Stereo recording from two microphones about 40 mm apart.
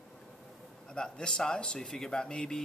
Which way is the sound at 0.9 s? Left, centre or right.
Left.